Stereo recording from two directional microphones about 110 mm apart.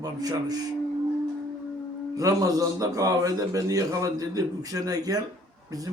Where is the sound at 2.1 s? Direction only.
30° right (ahead or behind).